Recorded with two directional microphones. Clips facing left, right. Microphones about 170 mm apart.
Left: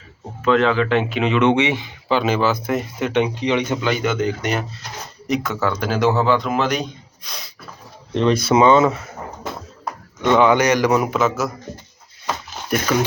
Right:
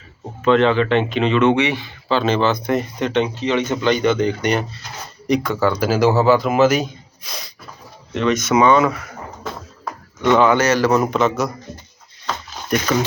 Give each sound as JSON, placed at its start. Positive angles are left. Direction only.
{"t": 0.4, "sound": "a man's voice", "side_deg": 5}
{"t": 8.1, "sound": "speech", "side_deg": 30}
{"t": 10.2, "sound": "speech", "side_deg": 15}
{"t": 12.7, "sound": "speech", "side_deg": 10}